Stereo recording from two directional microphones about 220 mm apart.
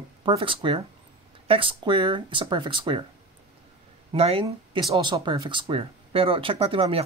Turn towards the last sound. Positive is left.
turn(degrees=-25)  # may be behind; listen again after turning